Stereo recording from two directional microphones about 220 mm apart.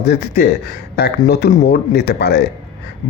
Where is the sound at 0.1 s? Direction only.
45° left (ahead or behind).